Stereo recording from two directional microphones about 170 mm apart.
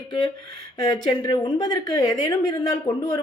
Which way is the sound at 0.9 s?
25° left (ahead or behind).